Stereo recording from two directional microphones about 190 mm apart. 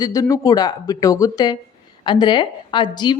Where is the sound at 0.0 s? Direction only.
20° left (ahead or behind).